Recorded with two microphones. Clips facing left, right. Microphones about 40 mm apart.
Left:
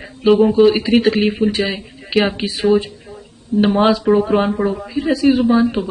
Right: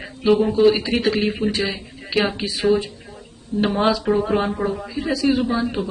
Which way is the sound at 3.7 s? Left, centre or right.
Left.